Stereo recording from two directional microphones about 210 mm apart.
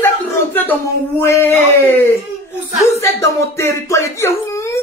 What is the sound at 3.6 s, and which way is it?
Speech, 15° left (ahead or behind).